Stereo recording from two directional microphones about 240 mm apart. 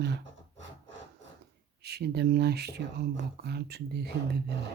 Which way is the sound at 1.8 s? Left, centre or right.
Right.